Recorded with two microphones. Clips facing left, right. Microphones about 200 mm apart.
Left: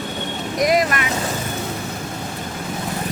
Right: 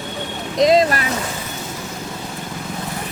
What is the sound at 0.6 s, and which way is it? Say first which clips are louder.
Speech: right 4 dB; 25° right (ahead or behind).